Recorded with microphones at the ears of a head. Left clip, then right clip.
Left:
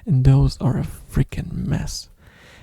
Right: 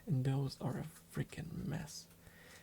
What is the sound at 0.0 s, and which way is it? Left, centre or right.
Speech, left.